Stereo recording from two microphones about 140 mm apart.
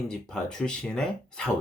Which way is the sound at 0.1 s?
5° left (ahead or behind).